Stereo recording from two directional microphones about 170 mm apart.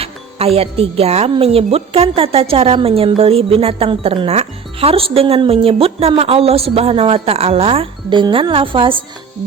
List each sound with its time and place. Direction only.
0.0 s speech: 35° right (ahead or behind)